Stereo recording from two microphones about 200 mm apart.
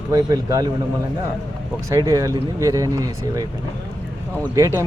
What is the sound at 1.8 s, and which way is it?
Speech, 15° right (ahead or behind).